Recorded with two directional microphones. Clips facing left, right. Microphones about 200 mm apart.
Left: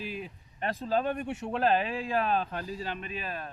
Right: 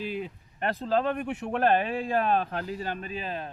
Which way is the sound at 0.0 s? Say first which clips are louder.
Right 5 dB; 60° right (ahead or behind).